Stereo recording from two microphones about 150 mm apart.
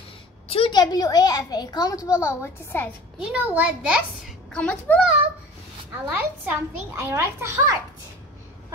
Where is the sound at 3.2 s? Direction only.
10° right (ahead or behind).